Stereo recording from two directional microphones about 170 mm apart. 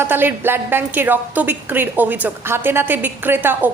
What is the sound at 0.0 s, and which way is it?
A woman's voice, 10° right (ahead or behind).